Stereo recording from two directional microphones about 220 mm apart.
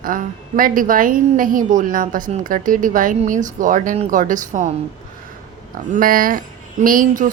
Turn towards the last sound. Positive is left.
turn(degrees=-35)  # may be behind; listen again after turning